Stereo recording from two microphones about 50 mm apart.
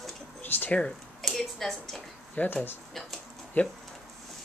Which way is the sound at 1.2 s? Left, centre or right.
Centre.